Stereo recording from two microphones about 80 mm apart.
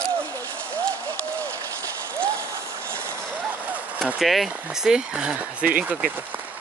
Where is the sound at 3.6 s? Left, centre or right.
Centre.